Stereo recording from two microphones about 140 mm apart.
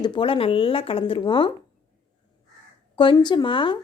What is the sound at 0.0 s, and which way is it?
A woman's voice, 35° left (ahead or behind).